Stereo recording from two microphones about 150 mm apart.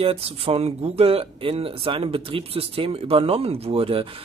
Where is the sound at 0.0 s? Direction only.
40° right (ahead or behind).